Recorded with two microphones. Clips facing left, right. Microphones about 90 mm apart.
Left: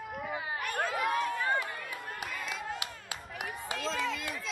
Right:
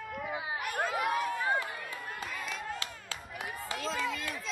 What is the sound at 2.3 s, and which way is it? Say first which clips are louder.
Crowd: left 1 dB; centre (ahead or behind).